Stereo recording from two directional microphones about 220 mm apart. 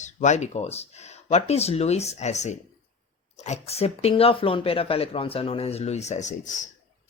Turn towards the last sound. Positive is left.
turn(degrees=35)  # may be behind; listen again after turning